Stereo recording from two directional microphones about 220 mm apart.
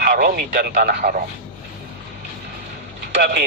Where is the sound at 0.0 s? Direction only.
40° right (ahead or behind).